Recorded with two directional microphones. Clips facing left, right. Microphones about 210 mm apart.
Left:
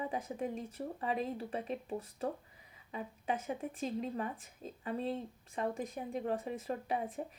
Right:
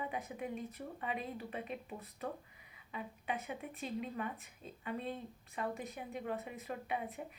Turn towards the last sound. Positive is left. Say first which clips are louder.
# left 4 dB
turn(degrees=35)  # may be behind; listen again after turning